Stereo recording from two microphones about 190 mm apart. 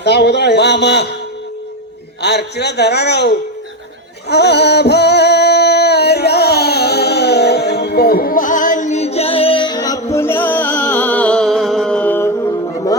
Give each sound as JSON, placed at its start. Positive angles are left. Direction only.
{"t": 0.0, "sound": "a man's voice", "side_deg": 60}
{"t": 2.2, "sound": "a man's voice", "side_deg": 60}
{"t": 4.3, "sound": "a sound", "side_deg": 60}